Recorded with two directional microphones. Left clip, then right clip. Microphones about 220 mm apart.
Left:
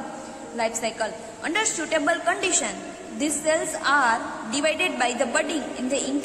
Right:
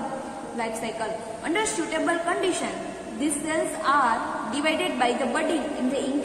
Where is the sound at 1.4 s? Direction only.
55° left (ahead or behind).